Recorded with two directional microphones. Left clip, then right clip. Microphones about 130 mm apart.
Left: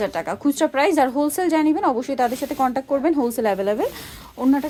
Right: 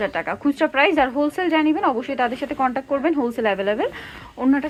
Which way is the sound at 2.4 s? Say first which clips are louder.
Left 1 dB; 30° left (ahead or behind).